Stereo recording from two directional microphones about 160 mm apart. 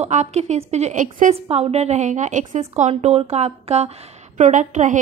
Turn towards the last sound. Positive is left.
turn(degrees=-50)  # may be behind; listen again after turning